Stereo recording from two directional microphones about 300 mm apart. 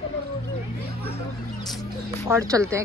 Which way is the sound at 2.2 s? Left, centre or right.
Centre.